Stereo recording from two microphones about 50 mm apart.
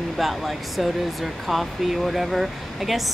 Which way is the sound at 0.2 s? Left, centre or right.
Centre.